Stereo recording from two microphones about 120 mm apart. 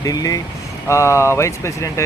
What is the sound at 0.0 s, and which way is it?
Speech, 30° left (ahead or behind).